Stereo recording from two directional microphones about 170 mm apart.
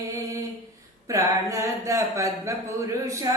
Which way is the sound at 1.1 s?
20° right (ahead or behind).